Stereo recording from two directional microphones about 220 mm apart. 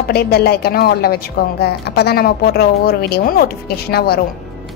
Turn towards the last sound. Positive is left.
turn(degrees=45)  # may be behind; listen again after turning